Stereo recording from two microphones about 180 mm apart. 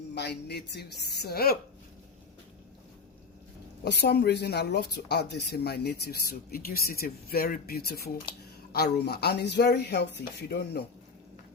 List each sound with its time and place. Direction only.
0.1 s speech: 70° left (ahead or behind)
3.8 s speech: 65° left (ahead or behind)